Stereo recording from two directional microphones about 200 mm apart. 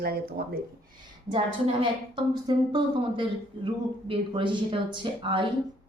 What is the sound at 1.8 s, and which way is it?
Speech, 25° right (ahead or behind).